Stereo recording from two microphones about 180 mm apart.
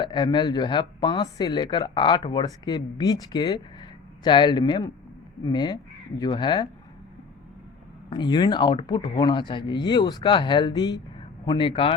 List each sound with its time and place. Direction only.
0.0 s speech: 25° left (ahead or behind)
8.1 s speech: 25° left (ahead or behind)